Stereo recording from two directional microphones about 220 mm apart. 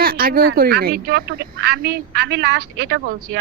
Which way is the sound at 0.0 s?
40° right (ahead or behind).